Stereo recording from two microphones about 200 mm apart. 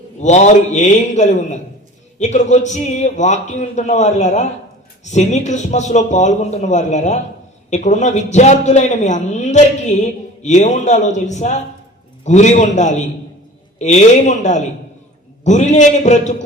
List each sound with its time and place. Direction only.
0.2 s a man's voice: 35° left (ahead or behind)